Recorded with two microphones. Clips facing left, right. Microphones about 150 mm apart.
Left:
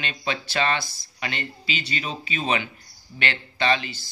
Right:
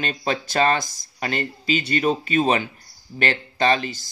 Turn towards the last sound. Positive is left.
turn(degrees=-40)  # may be behind; listen again after turning